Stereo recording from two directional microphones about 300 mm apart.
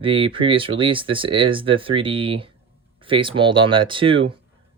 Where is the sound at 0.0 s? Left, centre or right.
Centre.